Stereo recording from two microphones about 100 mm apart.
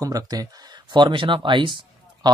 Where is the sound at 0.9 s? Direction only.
55° right (ahead or behind).